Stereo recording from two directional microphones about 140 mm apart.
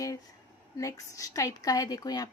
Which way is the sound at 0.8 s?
25° left (ahead or behind).